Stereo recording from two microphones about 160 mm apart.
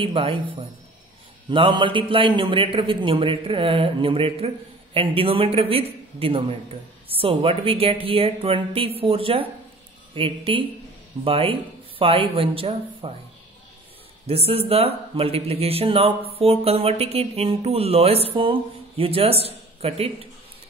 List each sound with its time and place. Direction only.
0.0 s a man's voice: 35° right (ahead or behind)
14.2 s a man's voice: 40° right (ahead or behind)